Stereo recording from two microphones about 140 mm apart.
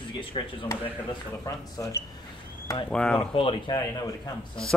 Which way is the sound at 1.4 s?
25° left (ahead or behind).